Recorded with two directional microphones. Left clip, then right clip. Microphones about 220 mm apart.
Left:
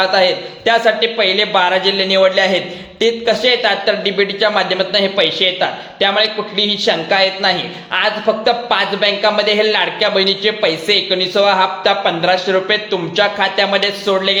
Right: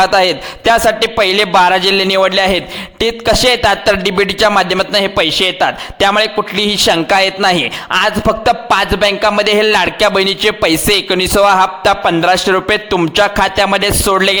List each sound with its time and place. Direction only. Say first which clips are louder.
0.0 s speech: right 3 dB; 50° right (ahead or behind)